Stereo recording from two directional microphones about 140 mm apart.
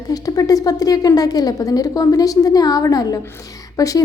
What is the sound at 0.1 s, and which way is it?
A woman's voice, 25° left (ahead or behind).